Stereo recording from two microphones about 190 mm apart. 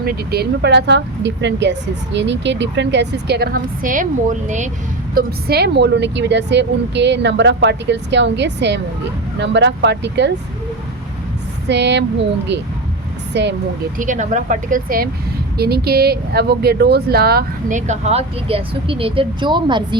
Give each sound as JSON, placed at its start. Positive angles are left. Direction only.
{"t": 0.0, "sound": "speech", "side_deg": -55}
{"t": 5.1, "sound": "speech", "side_deg": -55}
{"t": 11.7, "sound": "speech", "side_deg": -65}
{"t": 14.0, "sound": "speech", "side_deg": -40}